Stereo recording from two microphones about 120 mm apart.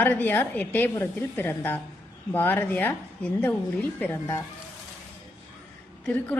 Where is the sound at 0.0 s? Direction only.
15° left (ahead or behind).